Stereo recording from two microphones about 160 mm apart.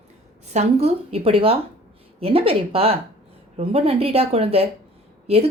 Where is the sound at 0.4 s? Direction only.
45° right (ahead or behind).